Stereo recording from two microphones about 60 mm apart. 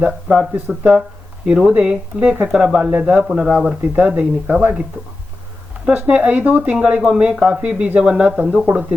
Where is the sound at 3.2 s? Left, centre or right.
Centre; by 4.8 s right.